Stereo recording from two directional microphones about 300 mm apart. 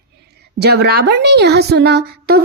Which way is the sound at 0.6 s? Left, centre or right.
Right.